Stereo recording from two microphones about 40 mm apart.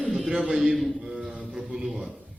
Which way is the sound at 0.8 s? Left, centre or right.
Centre.